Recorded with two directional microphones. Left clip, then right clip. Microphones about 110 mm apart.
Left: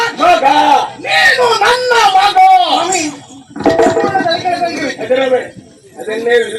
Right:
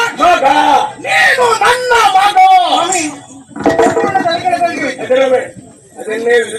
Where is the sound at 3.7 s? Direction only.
30° left (ahead or behind).